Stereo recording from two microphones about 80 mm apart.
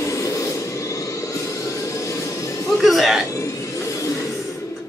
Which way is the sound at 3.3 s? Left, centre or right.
Left.